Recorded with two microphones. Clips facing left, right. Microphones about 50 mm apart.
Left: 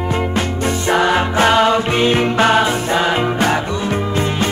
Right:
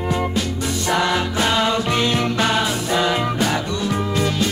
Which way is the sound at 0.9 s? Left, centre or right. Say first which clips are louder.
Left 5 dB; left.